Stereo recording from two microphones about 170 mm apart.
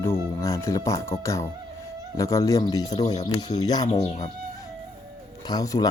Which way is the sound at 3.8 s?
40° left (ahead or behind).